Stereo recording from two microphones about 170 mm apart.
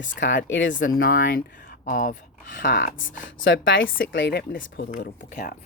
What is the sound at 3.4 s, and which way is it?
Speech, 90° left.